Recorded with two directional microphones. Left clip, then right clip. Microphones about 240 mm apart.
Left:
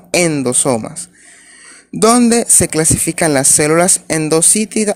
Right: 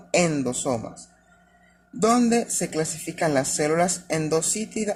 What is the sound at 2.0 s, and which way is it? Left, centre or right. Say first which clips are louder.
Speech: left 10 dB; left.